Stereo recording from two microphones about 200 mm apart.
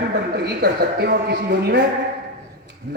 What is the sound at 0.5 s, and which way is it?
A man's voice, 55° right (ahead or behind).